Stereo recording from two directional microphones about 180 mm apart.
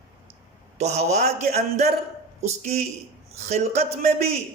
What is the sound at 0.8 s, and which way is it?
A man's voice, 35° right (ahead or behind).